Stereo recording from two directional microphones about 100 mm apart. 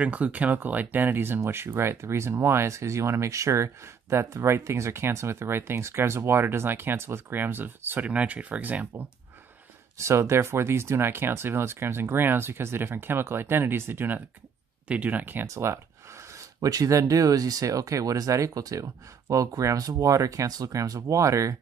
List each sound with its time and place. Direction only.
0.0 s speech: 15° right (ahead or behind)
9.9 s speech: 30° right (ahead or behind)
15.4 s speech: 30° right (ahead or behind)